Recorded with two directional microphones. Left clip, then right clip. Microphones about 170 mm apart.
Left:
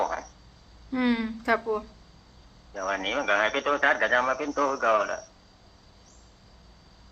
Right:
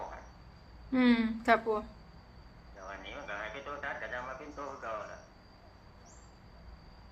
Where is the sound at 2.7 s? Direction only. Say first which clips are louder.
Left 16 dB; 75° left (ahead or behind).